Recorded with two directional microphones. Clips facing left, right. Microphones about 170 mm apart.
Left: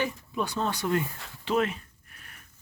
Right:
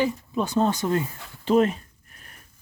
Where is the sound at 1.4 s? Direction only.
40° right (ahead or behind).